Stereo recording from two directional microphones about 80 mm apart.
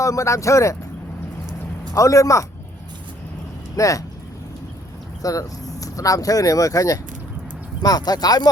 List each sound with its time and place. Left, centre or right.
0.0 s speech: left
1.9 s speech: left
3.8 s speech: left
5.2 s speech: left
7.8 s speech: left